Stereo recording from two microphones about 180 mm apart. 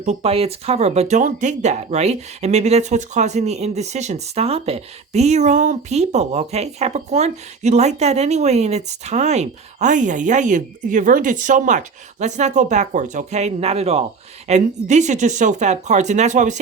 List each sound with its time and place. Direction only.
0.0 s speech: 35° right (ahead or behind)